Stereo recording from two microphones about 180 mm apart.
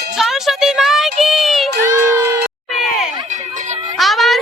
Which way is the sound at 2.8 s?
Centre (ahead or behind).